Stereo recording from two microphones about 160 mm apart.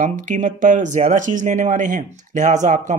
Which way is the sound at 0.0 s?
55° right (ahead or behind).